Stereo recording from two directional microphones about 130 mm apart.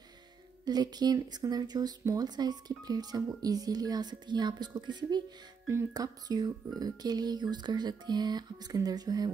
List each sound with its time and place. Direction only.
0.7 s speech: 30° right (ahead or behind)